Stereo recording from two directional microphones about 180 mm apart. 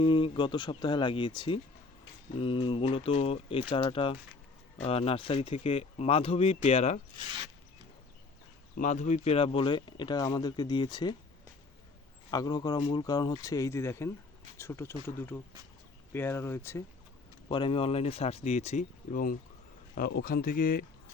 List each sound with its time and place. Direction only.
0.0 s speech: 30° left (ahead or behind)
8.8 s speech: 40° left (ahead or behind); by 11.1 s 25° left (ahead or behind)
12.3 s speech: 20° left (ahead or behind)
17.5 s speech: 30° left (ahead or behind); by 20.8 s 55° left (ahead or behind)